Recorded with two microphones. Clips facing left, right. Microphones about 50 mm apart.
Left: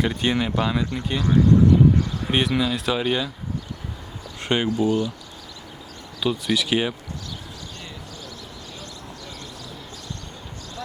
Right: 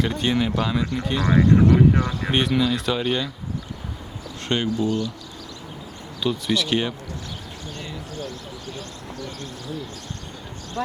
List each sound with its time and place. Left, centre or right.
0.0 s speech: centre
1.3 s speech: right
2.3 s speech: centre
4.4 s speech: centre
6.1 s speech: centre
10.8 s a sound: right